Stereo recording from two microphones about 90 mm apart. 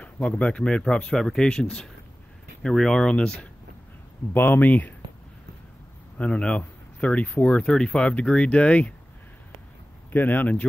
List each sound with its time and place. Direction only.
0.0 s speech: 10° left (ahead or behind)
4.3 s speech: 20° left (ahead or behind)
6.1 s speech: 15° left (ahead or behind)
10.1 s speech: 20° left (ahead or behind)